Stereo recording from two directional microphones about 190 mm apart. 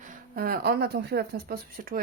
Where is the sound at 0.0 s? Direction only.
50° right (ahead or behind).